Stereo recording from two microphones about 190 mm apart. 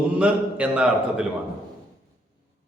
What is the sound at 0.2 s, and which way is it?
Mantra, 5° right (ahead or behind).